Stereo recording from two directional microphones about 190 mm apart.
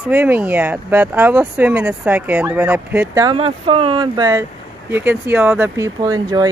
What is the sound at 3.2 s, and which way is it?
Speech, 30° right (ahead or behind).